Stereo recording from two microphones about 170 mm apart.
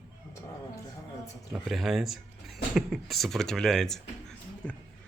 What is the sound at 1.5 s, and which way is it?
Speech, centre (ahead or behind).